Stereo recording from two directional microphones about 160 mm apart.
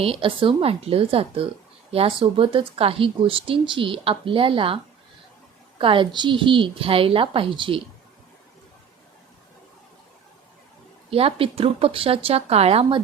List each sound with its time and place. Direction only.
0.0 s a woman's voice: 35° right (ahead or behind)
5.8 s a woman's voice: 35° right (ahead or behind)
11.1 s a woman's voice: 35° right (ahead or behind)